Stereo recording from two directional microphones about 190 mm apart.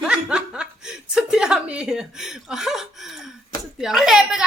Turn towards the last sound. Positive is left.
turn(degrees=-5)  # may be behind; listen again after turning